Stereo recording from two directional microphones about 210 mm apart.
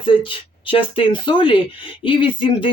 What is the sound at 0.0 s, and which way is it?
Speech, 25° left (ahead or behind).